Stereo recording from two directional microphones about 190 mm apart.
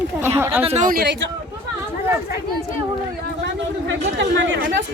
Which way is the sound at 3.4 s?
75° right (ahead or behind).